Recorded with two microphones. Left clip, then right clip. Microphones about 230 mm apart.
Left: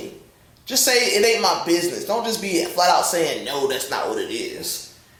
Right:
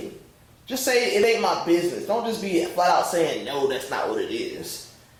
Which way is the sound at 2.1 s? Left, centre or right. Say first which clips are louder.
Left 2 dB; right.